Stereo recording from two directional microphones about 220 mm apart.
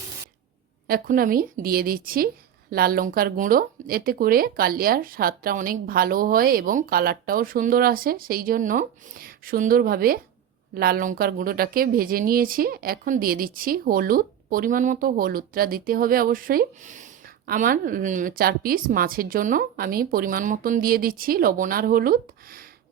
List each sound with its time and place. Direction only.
0.9 s a woman's voice: 40° right (ahead or behind)